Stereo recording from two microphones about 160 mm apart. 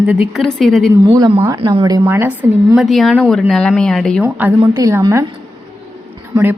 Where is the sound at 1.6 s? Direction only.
35° right (ahead or behind).